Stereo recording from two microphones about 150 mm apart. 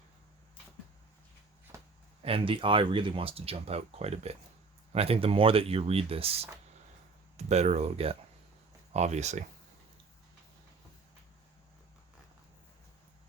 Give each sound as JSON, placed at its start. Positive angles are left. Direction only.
{"t": 2.2, "sound": "speech", "side_deg": -35}